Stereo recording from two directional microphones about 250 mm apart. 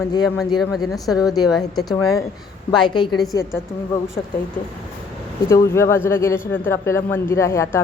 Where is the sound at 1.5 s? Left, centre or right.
Centre.